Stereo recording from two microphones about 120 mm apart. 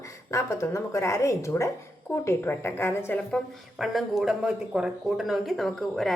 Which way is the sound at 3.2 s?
5° left (ahead or behind).